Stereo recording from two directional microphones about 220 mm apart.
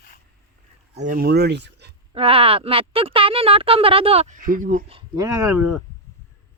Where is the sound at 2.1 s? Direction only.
25° right (ahead or behind).